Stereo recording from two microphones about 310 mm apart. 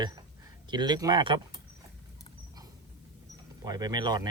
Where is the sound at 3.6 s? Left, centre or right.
Centre.